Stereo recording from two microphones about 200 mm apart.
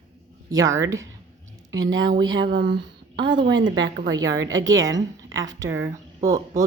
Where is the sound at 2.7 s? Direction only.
25° right (ahead or behind).